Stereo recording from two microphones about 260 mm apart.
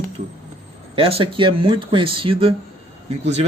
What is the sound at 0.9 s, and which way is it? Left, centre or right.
Speech, right.